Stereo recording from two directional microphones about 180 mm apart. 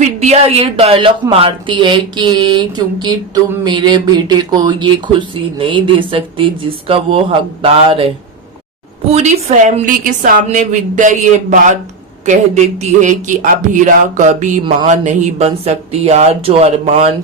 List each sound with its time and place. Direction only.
0.0 s a woman's voice: 40° right (ahead or behind)